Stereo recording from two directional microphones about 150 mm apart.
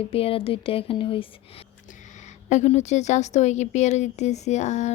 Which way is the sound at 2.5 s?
50° left (ahead or behind).